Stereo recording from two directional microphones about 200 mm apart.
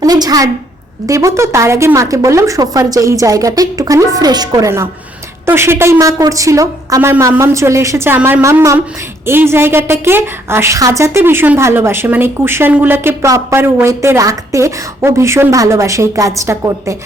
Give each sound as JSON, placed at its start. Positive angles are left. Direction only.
{"t": 0.0, "sound": "a woman's voice", "side_deg": -20}